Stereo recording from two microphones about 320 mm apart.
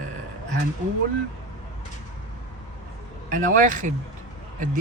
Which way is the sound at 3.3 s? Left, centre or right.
Right.